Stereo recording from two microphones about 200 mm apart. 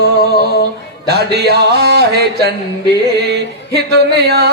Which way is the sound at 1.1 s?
55° right (ahead or behind).